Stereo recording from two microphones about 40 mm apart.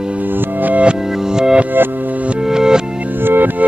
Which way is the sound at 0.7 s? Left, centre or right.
Right.